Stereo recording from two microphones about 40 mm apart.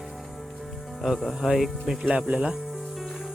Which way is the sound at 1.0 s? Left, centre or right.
Centre.